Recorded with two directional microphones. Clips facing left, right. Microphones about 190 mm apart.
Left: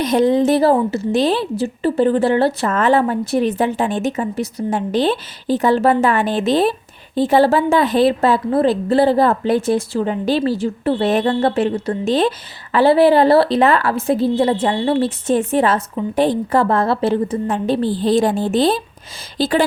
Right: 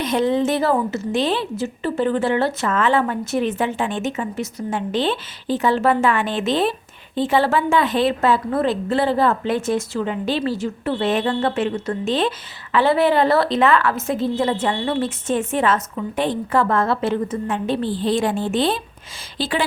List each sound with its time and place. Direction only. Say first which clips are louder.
0.0 s a woman's voice: left 4 dB; 40° left (ahead or behind)